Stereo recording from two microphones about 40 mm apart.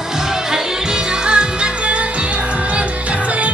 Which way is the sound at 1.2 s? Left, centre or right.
Right.